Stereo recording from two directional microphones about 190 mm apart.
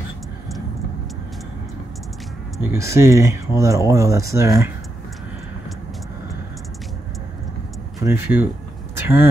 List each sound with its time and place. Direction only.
2.7 s speech: 15° right (ahead or behind)
8.0 s speech: 10° right (ahead or behind)